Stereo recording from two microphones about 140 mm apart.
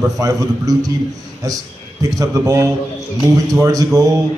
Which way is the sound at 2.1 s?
25° right (ahead or behind).